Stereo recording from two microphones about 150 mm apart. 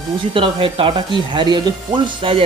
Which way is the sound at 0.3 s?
35° right (ahead or behind).